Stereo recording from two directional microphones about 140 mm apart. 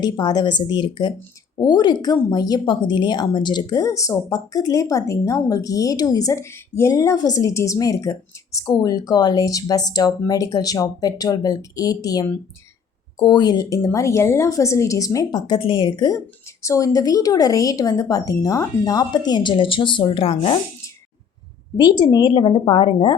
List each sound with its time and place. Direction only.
0.0 s a woman's voice: 30° left (ahead or behind)
21.8 s a woman's voice: 30° left (ahead or behind)